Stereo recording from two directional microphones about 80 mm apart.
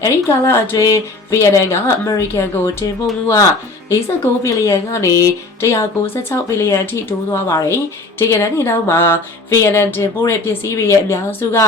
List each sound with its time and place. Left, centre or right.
0.0 s speech: left